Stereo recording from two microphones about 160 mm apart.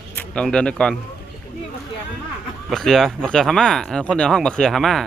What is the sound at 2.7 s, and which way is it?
Speech, centre (ahead or behind).